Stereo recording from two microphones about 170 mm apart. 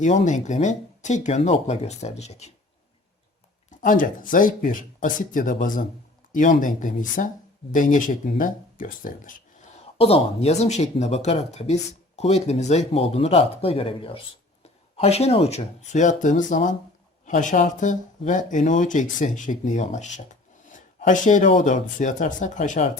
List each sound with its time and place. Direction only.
0.0 s speech: 45° left (ahead or behind)
3.7 s speech: 50° left (ahead or behind)